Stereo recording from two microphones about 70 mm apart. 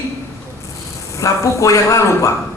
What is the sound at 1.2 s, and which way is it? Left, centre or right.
A man's voice, left.